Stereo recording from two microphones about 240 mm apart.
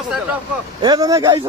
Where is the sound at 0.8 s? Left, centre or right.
Centre.